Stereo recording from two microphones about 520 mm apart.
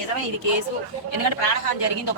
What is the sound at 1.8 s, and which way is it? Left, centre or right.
Speech, left.